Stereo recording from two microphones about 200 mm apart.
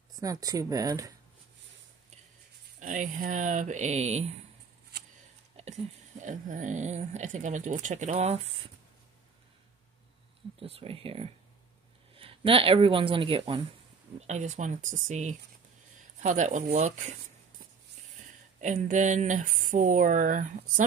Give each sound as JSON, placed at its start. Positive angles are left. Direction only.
{"t": 0.2, "sound": "speech", "side_deg": -15}
{"t": 2.8, "sound": "speech", "side_deg": -40}
{"t": 5.6, "sound": "speech", "side_deg": -35}
{"t": 10.6, "sound": "speech", "side_deg": -30}
{"t": 14.2, "sound": "speech", "side_deg": -35}
{"t": 18.6, "sound": "speech", "side_deg": -40}